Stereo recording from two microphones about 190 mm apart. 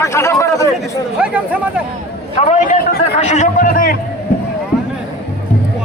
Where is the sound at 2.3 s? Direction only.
40° left (ahead or behind).